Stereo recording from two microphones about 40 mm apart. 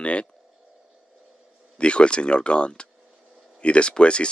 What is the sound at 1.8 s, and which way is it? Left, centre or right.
Speech, left.